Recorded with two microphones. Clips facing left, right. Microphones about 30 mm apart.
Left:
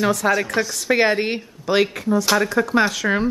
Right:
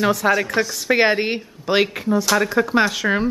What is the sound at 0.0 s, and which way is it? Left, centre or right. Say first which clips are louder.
A woman's voice: right 1 dB; centre.